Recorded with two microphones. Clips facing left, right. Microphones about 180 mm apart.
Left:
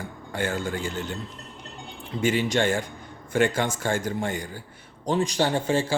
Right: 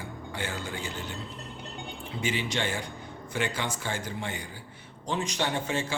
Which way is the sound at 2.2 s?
45° left (ahead or behind).